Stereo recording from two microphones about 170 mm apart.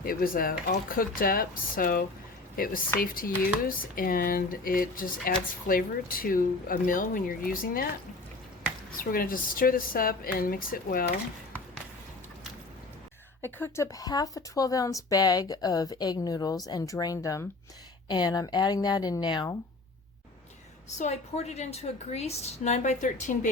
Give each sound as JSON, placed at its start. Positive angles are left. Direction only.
{"t": 0.0, "sound": "speech", "side_deg": 60}
{"t": 9.0, "sound": "speech", "side_deg": 55}
{"t": 13.4, "sound": "speech", "side_deg": 15}
{"t": 21.0, "sound": "a woman's voice", "side_deg": 40}